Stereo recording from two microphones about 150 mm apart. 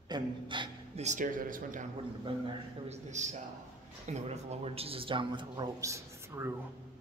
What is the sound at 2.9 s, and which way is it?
A man's voice, 50° right (ahead or behind).